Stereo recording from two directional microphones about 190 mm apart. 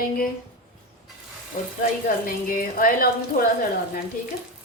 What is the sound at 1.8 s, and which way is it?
Speech, 50° left (ahead or behind).